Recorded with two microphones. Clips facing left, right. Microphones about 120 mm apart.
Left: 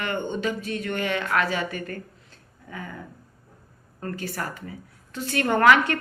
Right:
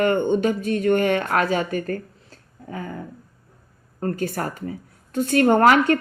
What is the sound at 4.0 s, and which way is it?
A woman's voice, 40° right (ahead or behind).